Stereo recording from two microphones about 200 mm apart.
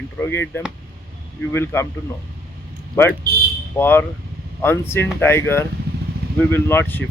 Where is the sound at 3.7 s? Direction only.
10° left (ahead or behind).